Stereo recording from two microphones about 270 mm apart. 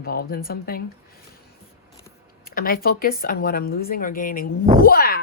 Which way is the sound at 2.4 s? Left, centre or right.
Left.